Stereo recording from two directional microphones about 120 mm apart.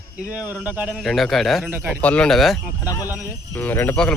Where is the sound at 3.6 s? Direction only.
15° left (ahead or behind).